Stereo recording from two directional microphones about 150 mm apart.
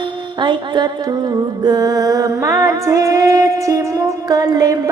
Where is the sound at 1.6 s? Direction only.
25° right (ahead or behind).